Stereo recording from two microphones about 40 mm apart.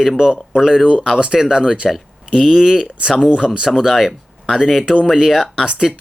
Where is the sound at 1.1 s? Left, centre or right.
Right.